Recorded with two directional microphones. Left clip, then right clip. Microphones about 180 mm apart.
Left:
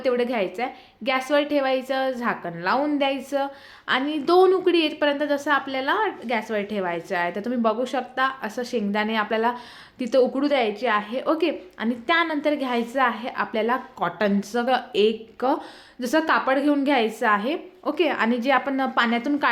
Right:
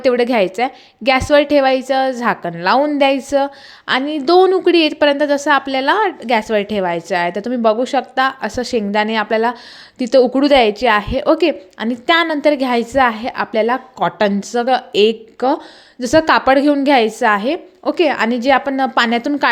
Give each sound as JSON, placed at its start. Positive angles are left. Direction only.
{"t": 0.0, "sound": "a woman's voice", "side_deg": -40}